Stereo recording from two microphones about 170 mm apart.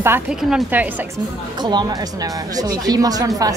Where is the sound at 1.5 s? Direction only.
25° right (ahead or behind).